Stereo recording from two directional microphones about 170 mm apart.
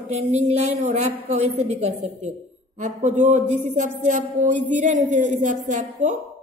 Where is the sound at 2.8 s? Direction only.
45° right (ahead or behind).